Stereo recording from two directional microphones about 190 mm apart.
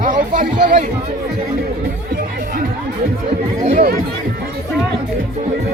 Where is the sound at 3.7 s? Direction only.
40° right (ahead or behind).